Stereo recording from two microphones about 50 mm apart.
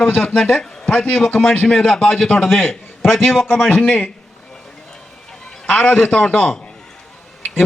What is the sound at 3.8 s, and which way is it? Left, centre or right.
Speech, left.